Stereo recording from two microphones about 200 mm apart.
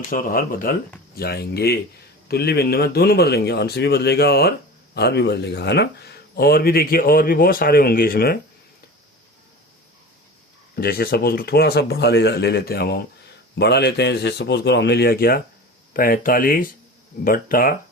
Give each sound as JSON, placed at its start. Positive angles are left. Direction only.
{"t": 0.1, "sound": "speech", "side_deg": 45}
{"t": 10.8, "sound": "a man's voice", "side_deg": 50}